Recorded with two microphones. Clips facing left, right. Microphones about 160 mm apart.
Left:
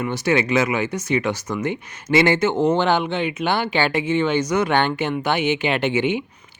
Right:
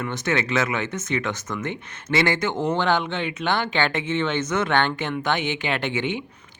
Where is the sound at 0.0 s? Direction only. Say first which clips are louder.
Left 5 dB; 15° left (ahead or behind).